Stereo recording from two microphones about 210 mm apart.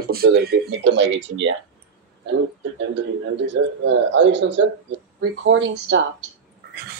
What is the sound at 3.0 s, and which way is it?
A man's voice, 60° right (ahead or behind).